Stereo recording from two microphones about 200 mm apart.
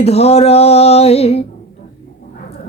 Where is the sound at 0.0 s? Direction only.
30° left (ahead or behind).